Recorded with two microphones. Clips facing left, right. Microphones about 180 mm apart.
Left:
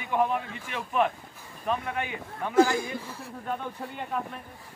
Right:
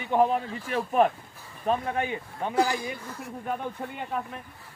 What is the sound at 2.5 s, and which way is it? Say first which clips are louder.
Speech: left 4 dB; 50° left (ahead or behind).